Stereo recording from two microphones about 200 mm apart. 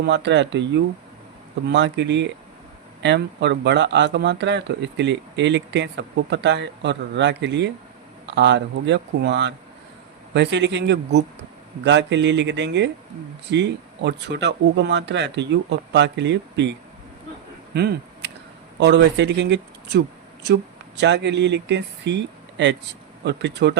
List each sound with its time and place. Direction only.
0.0 s speech: 60° right (ahead or behind)
17.7 s a sound: 55° right (ahead or behind)
18.8 s speech: 60° right (ahead or behind)